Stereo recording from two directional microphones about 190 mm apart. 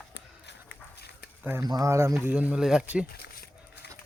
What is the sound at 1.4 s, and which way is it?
Speech, 15° right (ahead or behind).